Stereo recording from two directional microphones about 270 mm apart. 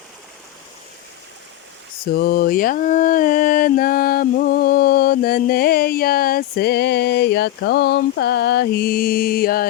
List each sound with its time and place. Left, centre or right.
2.1 s mantra: left